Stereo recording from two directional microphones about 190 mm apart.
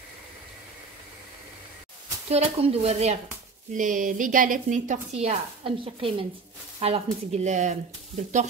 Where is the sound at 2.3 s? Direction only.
30° right (ahead or behind).